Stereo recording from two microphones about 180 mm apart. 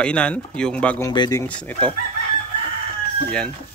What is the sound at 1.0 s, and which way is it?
Speech, 20° left (ahead or behind).